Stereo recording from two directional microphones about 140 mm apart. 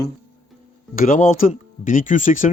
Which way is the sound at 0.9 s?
70° left (ahead or behind).